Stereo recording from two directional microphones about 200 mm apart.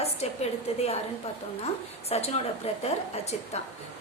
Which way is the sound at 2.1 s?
30° left (ahead or behind).